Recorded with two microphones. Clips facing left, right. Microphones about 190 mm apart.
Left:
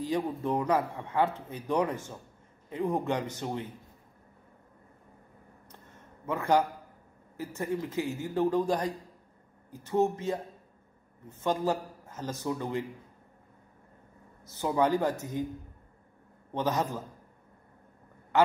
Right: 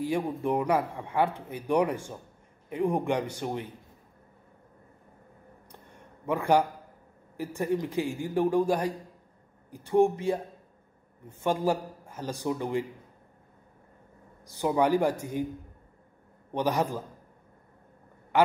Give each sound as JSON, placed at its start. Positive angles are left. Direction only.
{"t": 0.0, "sound": "a man's voice", "side_deg": -10}
{"t": 5.7, "sound": "a sound", "side_deg": -15}
{"t": 7.3, "sound": "a man's voice", "side_deg": -15}
{"t": 14.4, "sound": "a man's voice", "side_deg": -15}
{"t": 16.5, "sound": "a man's voice", "side_deg": -15}
{"t": 18.3, "sound": "a man's voice", "side_deg": -10}